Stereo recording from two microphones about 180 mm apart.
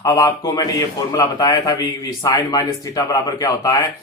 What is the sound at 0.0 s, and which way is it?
A man's voice, 20° left (ahead or behind).